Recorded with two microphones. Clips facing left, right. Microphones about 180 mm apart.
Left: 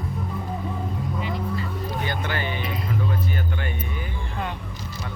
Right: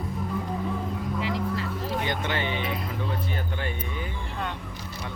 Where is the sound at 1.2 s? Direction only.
90° right.